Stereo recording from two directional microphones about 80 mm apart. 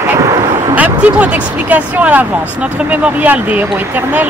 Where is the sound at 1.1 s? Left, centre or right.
Centre.